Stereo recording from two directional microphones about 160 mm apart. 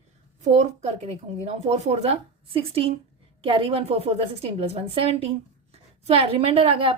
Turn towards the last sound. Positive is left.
turn(degrees=-35)  # may be behind; listen again after turning